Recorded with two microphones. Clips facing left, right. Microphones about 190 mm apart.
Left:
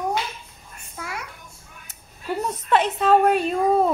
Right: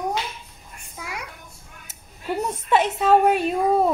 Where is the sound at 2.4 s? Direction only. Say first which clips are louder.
Even; 10° right (ahead or behind).